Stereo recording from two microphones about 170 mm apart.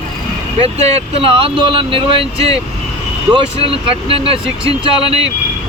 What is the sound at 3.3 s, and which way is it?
Speech, 30° right (ahead or behind).